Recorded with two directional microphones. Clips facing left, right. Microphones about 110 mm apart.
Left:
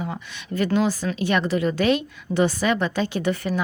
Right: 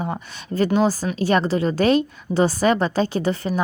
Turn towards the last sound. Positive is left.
turn(degrees=-30)  # may be behind; listen again after turning